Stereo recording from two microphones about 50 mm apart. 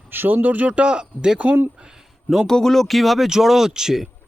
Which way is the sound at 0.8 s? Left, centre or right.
Centre.